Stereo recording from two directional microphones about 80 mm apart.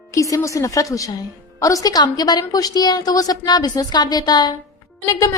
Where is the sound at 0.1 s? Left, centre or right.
Left.